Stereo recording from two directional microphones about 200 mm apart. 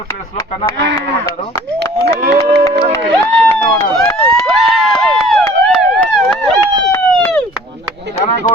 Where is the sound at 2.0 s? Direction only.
55° right (ahead or behind).